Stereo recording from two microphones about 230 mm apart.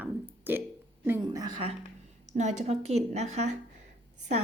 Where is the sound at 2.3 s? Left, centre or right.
Right.